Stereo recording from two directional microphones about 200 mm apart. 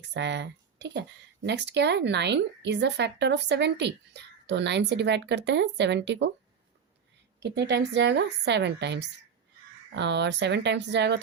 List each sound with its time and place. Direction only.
0.1 s speech: 60° right (ahead or behind)
7.4 s speech: 60° right (ahead or behind)